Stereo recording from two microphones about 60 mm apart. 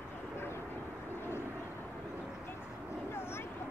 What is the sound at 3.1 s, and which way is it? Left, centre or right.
Vehicle, left.